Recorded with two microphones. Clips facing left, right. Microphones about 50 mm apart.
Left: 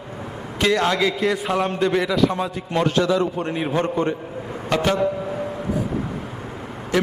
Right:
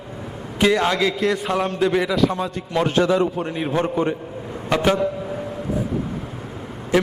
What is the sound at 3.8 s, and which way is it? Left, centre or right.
A man's voice, centre.